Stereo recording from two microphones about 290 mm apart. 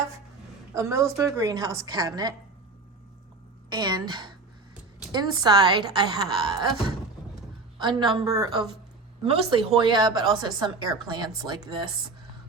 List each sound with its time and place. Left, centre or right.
0.7 s a woman's voice: centre
3.7 s a woman's voice: centre
7.8 s a woman's voice: centre